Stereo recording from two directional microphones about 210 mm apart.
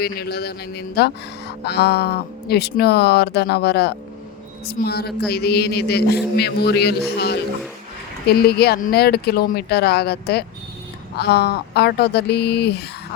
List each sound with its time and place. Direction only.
0.0 s a man's voice: 50° left (ahead or behind)
8.3 s a man's voice: 50° left (ahead or behind)